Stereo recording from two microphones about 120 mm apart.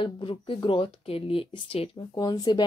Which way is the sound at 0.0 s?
45° left (ahead or behind).